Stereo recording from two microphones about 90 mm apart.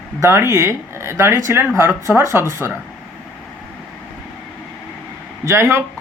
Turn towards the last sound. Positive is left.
turn(degrees=-30)  # may be behind; listen again after turning